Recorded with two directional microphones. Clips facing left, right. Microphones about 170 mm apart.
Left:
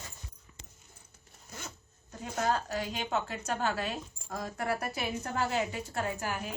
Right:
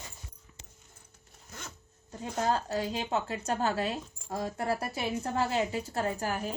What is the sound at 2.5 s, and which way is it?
Speech, 25° right (ahead or behind).